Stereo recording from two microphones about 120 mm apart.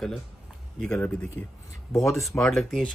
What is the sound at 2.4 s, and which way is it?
Speech, 5° left (ahead or behind).